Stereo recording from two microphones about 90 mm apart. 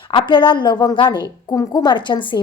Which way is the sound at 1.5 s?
45° left (ahead or behind).